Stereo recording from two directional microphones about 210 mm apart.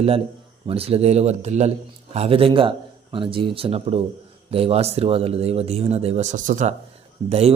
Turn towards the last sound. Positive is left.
turn(degrees=-30)  # may be behind; listen again after turning